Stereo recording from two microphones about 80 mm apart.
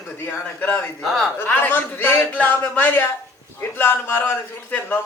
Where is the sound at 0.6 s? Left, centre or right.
Left.